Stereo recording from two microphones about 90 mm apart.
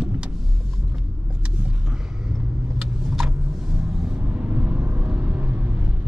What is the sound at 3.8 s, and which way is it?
Vehicle, 10° right (ahead or behind).